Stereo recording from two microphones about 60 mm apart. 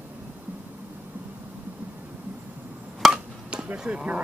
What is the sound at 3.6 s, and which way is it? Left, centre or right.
Speech, centre.